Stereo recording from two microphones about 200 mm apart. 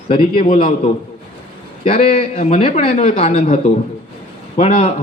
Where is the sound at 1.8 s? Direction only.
30° left (ahead or behind).